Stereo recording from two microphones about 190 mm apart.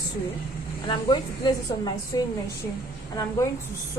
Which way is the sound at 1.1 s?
25° left (ahead or behind).